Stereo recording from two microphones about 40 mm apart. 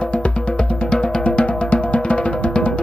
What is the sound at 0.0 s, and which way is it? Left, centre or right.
Music, left.